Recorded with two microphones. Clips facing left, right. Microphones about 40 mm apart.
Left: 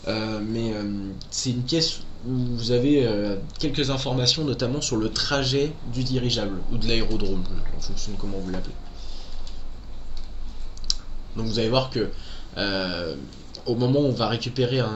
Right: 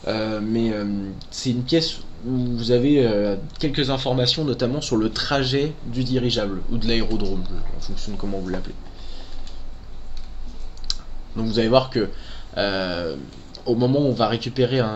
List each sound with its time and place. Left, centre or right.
0.0 s speech: centre
4.4 s speech: centre
7.8 s speech: centre
10.9 s clicking: centre
12.5 s speech: centre